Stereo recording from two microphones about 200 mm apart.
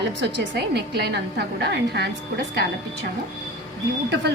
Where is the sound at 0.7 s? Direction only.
55° right (ahead or behind).